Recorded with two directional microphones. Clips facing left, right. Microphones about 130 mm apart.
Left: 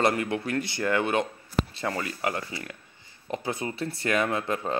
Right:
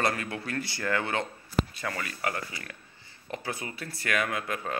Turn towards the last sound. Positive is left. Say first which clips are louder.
# left 4 dB
turn(degrees=25)  # may be behind; listen again after turning